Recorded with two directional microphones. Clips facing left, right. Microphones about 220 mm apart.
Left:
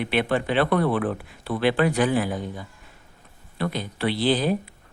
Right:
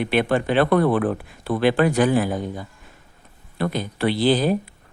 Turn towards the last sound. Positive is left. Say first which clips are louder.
# right 3 dB
turn(degrees=-45)  # may be behind; listen again after turning